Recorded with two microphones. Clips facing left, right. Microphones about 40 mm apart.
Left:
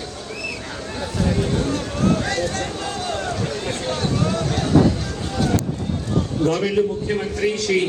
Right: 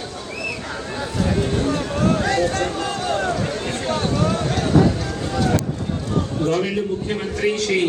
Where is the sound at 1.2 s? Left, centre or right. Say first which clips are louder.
Right 1 dB; right.